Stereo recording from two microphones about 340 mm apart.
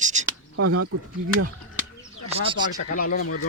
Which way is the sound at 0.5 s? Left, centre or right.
Right.